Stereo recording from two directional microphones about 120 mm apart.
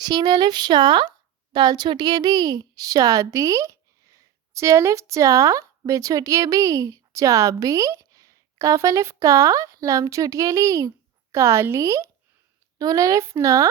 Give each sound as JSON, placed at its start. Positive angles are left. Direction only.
{"t": 0.0, "sound": "a woman's voice", "side_deg": -35}